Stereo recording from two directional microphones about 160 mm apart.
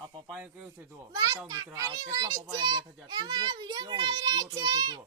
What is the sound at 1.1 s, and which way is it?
A child's voice, 20° right (ahead or behind).